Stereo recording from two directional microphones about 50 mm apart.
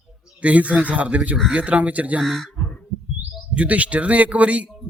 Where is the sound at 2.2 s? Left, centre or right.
Centre.